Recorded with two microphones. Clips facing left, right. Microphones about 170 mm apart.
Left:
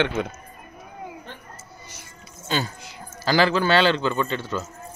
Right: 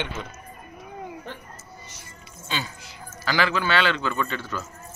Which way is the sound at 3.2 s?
35° left (ahead or behind).